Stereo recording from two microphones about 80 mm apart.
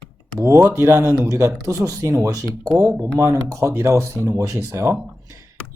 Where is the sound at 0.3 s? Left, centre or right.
Right.